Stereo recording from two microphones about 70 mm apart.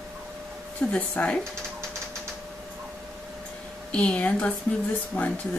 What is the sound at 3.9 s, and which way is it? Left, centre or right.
Speech, centre.